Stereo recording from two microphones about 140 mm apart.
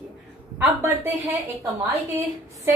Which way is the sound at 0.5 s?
15° right (ahead or behind).